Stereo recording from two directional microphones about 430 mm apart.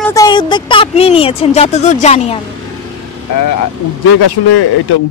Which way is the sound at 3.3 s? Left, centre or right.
Left.